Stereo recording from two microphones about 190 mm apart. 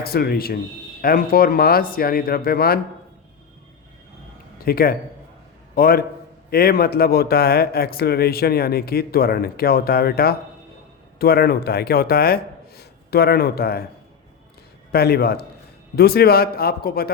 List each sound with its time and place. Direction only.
0.0 s speech: 55° left (ahead or behind)
4.6 s speech: 55° left (ahead or behind)
14.9 s speech: 55° left (ahead or behind)